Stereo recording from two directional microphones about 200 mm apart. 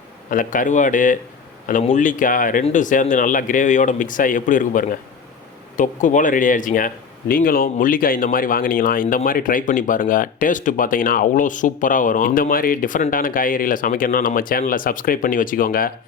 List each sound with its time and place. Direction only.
0.3 s speech: 40° left (ahead or behind)